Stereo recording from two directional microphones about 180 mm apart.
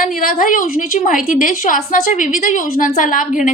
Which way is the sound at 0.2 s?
50° left (ahead or behind).